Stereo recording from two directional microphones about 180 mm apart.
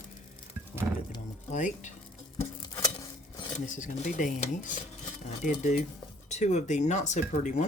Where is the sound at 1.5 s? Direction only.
45° left (ahead or behind).